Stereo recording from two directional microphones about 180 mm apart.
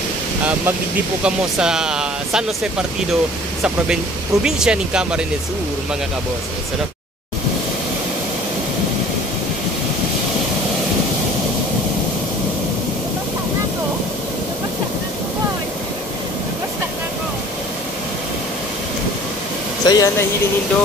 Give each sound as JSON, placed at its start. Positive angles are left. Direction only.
{"t": 1.2, "sound": "speech", "side_deg": -5}
{"t": 19.9, "sound": "speech", "side_deg": 20}